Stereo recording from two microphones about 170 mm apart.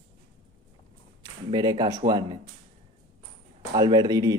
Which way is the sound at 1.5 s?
25° right (ahead or behind).